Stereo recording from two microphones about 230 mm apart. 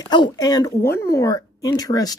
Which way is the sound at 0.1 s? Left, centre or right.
Centre.